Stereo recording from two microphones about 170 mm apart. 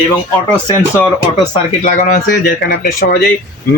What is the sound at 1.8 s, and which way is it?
Speech, 45° left (ahead or behind).